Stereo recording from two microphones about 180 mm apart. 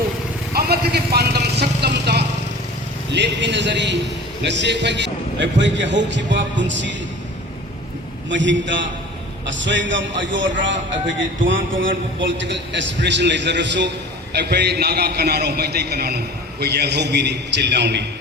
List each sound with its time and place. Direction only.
0.5 s vehicle: 60° right (ahead or behind)
3.1 s a man's voice: 75° right (ahead or behind)
8.3 s a man's voice: 90° right
14.3 s a man's voice: 65° right (ahead or behind)